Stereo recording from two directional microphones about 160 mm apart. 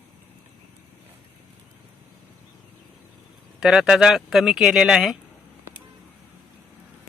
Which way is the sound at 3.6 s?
Centre (ahead or behind).